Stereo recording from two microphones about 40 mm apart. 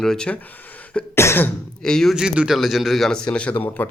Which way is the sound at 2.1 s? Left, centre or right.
Right.